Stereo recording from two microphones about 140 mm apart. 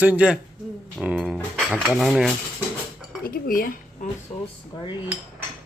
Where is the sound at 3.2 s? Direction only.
90° left.